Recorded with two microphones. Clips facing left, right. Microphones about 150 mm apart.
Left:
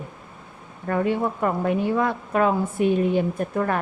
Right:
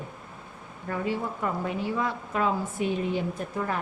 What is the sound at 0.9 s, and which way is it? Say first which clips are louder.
A woman's voice: left 7 dB; 60° left (ahead or behind).